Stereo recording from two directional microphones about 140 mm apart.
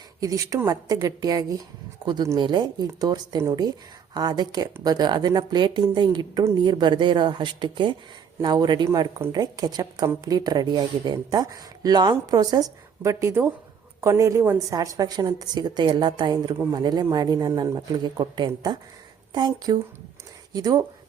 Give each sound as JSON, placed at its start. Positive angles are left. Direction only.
{"t": 0.2, "sound": "a woman's voice", "side_deg": -25}